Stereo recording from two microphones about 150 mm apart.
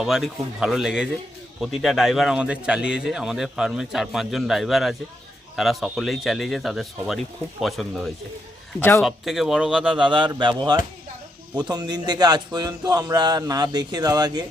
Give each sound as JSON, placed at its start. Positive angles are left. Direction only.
{"t": 0.0, "sound": "a man's voice", "side_deg": -5}
{"t": 10.1, "sound": "speech", "side_deg": -30}